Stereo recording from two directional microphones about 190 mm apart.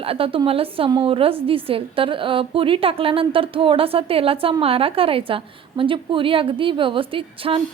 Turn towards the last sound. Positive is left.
turn(degrees=-30)  # may be behind; listen again after turning